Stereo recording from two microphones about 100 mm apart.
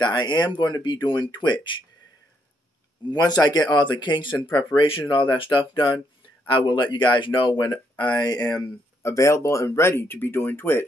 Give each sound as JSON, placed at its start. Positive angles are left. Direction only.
{"t": 0.0, "sound": "speech", "side_deg": 45}
{"t": 3.1, "sound": "speech", "side_deg": 40}
{"t": 4.7, "sound": "speech", "side_deg": 60}
{"t": 7.5, "sound": "speech", "side_deg": 40}
{"t": 9.0, "sound": "speech", "side_deg": 30}